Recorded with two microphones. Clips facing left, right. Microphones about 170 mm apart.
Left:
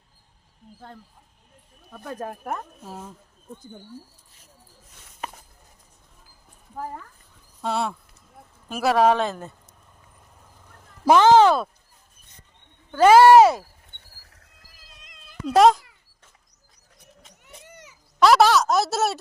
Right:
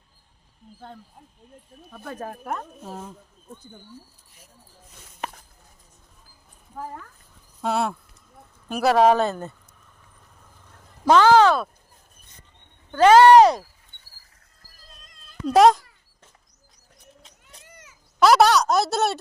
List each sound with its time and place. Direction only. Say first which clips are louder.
1.9 s speech: left 1 dB; centre (ahead or behind)
7.6 s speech: right 2 dB; 5° right (ahead or behind)
11.2 s speech: left 1 dB; 20° left (ahead or behind)
12.9 s speech: even; 10° left (ahead or behind)
15.4 s speech: right 1 dB; centre (ahead or behind)
18.2 s speech: even; centre (ahead or behind)